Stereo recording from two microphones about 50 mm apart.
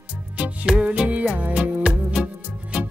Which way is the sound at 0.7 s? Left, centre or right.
Right.